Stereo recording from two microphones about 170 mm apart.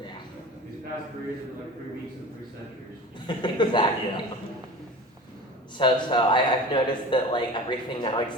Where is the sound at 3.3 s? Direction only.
25° left (ahead or behind).